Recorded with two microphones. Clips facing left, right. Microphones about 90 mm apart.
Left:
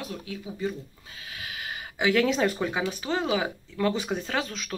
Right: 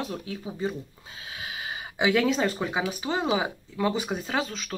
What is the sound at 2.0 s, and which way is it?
Speech, 10° right (ahead or behind).